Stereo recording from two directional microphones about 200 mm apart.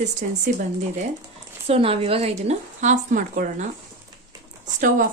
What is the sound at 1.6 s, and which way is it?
Speech, 30° right (ahead or behind).